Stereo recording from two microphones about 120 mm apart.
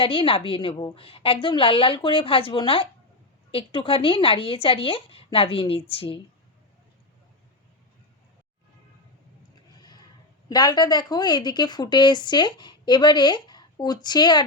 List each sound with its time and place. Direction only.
0.0 s a woman's voice: 50° left (ahead or behind)
10.5 s a woman's voice: 35° left (ahead or behind)